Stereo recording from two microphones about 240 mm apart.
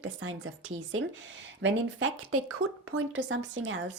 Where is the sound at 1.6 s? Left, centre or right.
Right.